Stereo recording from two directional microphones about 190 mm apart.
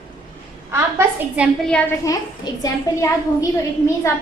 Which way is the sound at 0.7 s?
10° right (ahead or behind).